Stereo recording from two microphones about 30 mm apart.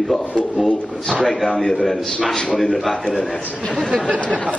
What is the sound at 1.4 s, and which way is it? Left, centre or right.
A man's voice, centre.